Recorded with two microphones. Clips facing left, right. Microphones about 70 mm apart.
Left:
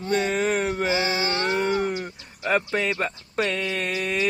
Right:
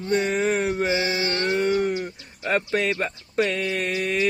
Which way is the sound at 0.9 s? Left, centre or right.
Left.